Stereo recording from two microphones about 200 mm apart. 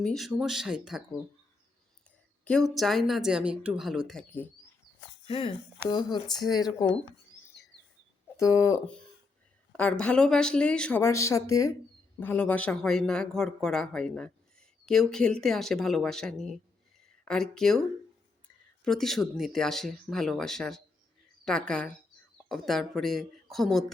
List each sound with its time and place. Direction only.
0.0 s speech: centre (ahead or behind)
2.4 s speech: 5° left (ahead or behind)
5.2 s speech: 25° left (ahead or behind)
8.4 s speech: 15° left (ahead or behind)
18.9 s speech: centre (ahead or behind)